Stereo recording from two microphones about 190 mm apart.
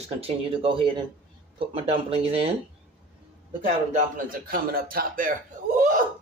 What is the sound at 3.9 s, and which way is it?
A man's voice, 45° right (ahead or behind).